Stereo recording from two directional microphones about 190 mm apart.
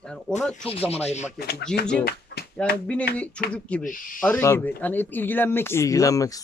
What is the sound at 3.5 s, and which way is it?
Speech, 5° left (ahead or behind).